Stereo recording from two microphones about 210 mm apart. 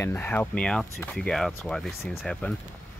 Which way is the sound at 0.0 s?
10° left (ahead or behind).